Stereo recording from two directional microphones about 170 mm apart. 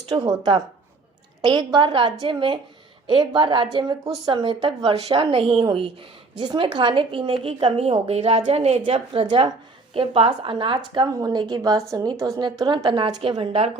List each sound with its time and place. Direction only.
0.1 s a woman's voice: 25° right (ahead or behind)